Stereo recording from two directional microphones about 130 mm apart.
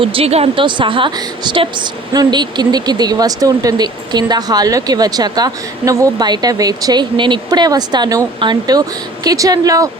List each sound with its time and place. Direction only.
0.0 s speech: 45° right (ahead or behind); by 9.9 s 25° right (ahead or behind)